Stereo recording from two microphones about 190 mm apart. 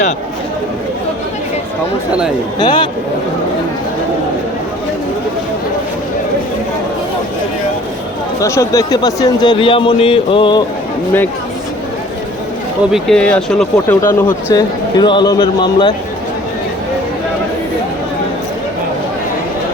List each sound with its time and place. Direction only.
2.6 s speech: 25° left (ahead or behind)
8.4 s speech: 15° left (ahead or behind)
12.9 s speech: 5° left (ahead or behind)
14.0 s speech: 20° left (ahead or behind)